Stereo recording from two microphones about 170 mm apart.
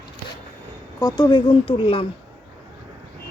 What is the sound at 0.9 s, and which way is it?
Speech, 20° left (ahead or behind).